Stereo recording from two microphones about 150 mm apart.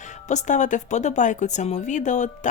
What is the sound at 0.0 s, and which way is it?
Speech, 50° left (ahead or behind).